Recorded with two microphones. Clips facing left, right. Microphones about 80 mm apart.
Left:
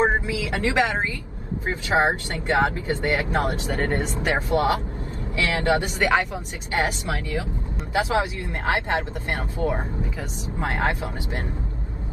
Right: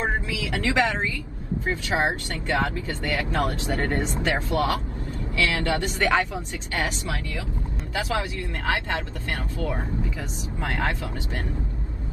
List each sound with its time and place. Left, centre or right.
0.0 s speech: left
6.3 s speech: left